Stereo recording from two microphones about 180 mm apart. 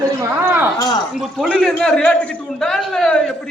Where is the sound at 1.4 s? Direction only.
Centre (ahead or behind).